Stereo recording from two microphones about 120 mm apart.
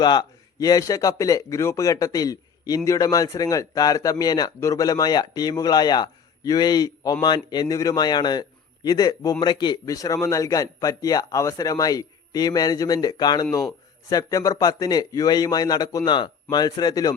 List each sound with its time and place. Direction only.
0.0 s speech: 35° left (ahead or behind)